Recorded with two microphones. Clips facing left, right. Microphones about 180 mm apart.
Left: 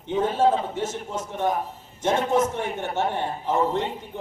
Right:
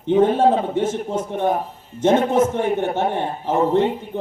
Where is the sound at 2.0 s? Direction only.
55° right (ahead or behind).